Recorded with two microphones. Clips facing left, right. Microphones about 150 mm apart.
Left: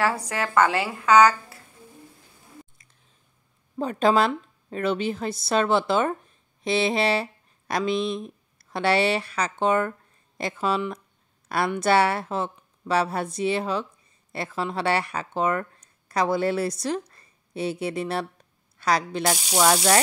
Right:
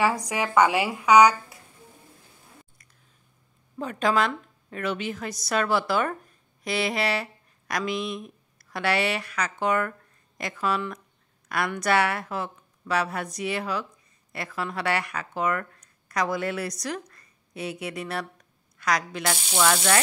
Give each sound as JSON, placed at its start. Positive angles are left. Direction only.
{"t": 0.0, "sound": "a woman's voice", "side_deg": -15}
{"t": 3.7, "sound": "a woman's voice", "side_deg": 30}